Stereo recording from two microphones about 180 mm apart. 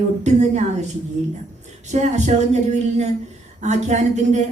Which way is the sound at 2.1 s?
40° right (ahead or behind).